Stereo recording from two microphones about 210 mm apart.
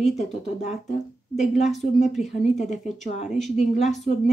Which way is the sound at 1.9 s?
35° left (ahead or behind).